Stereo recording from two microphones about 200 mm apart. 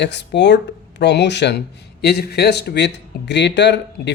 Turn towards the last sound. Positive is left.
turn(degrees=60)  # may be behind; listen again after turning